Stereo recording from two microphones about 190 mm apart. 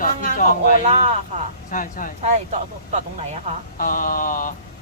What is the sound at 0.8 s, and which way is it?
Speech, 35° right (ahead or behind).